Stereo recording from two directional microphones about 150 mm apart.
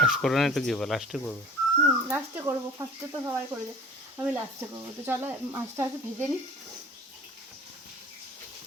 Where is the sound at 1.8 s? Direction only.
15° right (ahead or behind).